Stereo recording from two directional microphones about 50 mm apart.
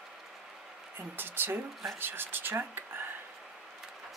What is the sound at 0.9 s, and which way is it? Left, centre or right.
Speech, right.